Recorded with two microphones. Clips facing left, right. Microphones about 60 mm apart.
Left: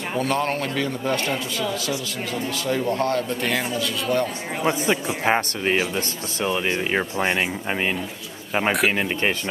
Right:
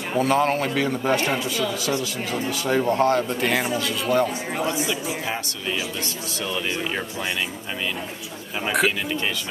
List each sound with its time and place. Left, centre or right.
0.1 s speech: centre
4.6 s speech: left
6.4 s speech: left